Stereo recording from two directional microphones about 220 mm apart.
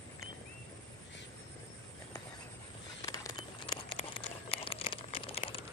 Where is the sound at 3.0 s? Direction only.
15° left (ahead or behind).